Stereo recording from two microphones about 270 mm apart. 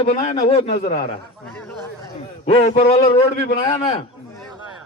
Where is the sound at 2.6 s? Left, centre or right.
Left.